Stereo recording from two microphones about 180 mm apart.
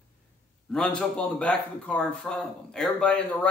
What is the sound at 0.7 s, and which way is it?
Speech, 5° left (ahead or behind).